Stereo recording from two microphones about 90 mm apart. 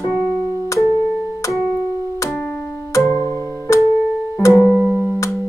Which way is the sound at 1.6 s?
25° right (ahead or behind).